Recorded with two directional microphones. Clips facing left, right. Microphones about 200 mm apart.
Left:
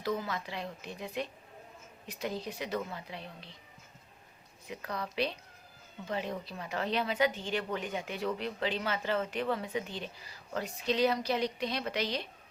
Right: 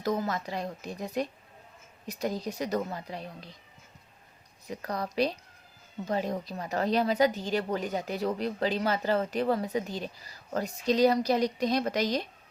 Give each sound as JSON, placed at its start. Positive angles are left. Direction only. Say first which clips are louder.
{"t": 0.0, "sound": "a woman's voice", "louder": "right 5 dB", "side_deg": -40}
{"t": 4.6, "sound": "a woman's voice", "louder": "right 5 dB", "side_deg": -40}